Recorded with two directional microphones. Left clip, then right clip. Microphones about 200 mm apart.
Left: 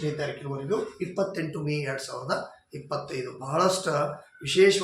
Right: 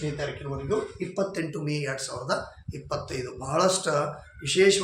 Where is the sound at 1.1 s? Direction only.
20° right (ahead or behind).